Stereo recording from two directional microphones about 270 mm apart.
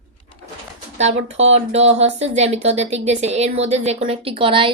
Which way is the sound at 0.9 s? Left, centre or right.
Right.